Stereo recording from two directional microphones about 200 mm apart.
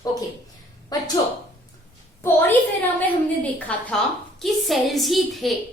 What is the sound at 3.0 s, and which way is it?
A woman's voice, 5° left (ahead or behind).